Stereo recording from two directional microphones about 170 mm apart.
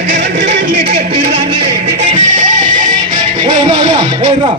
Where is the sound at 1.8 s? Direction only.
45° right (ahead or behind).